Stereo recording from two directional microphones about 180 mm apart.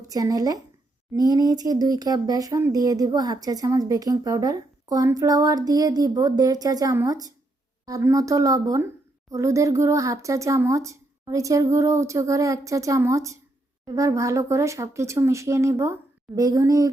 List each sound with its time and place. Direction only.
0.1 s speech: 20° right (ahead or behind)